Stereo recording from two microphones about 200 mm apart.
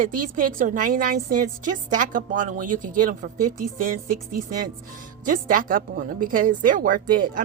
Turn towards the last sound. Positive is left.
turn(degrees=-45)  # may be behind; listen again after turning